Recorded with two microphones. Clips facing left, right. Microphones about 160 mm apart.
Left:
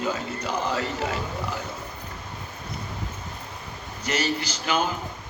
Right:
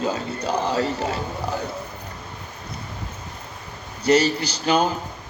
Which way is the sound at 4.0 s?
35° right (ahead or behind).